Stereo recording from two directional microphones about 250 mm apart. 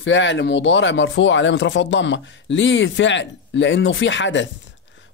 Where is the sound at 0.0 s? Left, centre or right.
Left.